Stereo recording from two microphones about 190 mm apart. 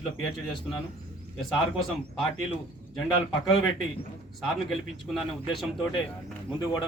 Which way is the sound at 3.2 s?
30° left (ahead or behind).